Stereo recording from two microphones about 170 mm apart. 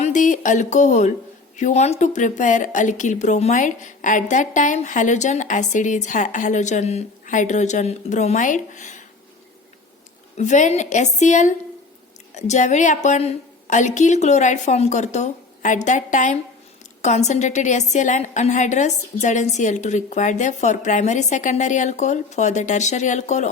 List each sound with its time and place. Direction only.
0.0 s speech: 45° left (ahead or behind)
10.3 s speech: 45° left (ahead or behind)